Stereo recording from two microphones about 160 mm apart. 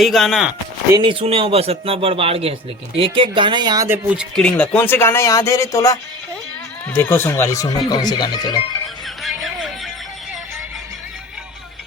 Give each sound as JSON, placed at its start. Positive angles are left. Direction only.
{"t": 0.0, "sound": "speech", "side_deg": 0}
{"t": 0.9, "sound": "a man's voice", "side_deg": -35}
{"t": 3.8, "sound": "speech", "side_deg": -10}
{"t": 4.4, "sound": "speech", "side_deg": 10}
{"t": 9.2, "sound": "music", "side_deg": 0}